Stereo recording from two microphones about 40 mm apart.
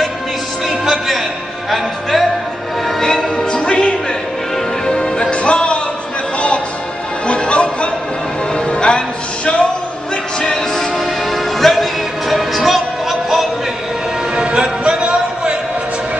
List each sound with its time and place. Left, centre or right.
0.7 s music: centre
3.0 s music: centre
3.5 s music: left
5.3 s music: left
7.2 s a sound: left
8.5 s music: left
10.4 s music: centre
14.3 s music: right